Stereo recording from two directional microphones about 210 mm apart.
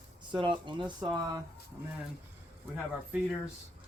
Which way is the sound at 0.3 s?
20° right (ahead or behind).